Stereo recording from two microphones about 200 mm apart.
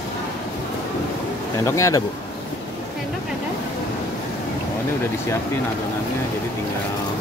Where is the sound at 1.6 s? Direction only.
15° left (ahead or behind).